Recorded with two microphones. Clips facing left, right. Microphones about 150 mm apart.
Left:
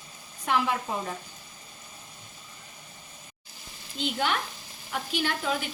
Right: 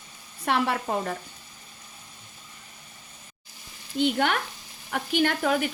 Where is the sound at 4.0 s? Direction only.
60° right (ahead or behind).